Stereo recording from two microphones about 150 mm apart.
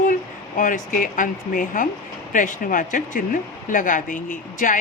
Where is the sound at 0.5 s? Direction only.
60° left (ahead or behind).